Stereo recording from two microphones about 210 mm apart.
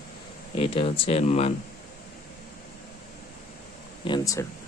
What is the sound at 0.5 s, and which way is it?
Speech, 25° left (ahead or behind).